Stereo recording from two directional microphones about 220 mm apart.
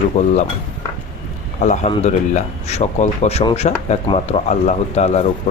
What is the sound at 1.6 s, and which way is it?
Speech, 30° left (ahead or behind).